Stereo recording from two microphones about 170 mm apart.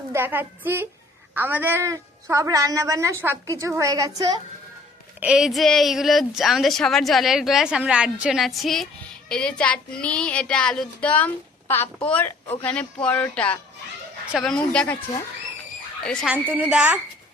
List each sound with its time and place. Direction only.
0.1 s a woman's voice: 10° right (ahead or behind)
5.2 s speech: 5° right (ahead or behind)
16.3 s a woman's voice: 10° right (ahead or behind)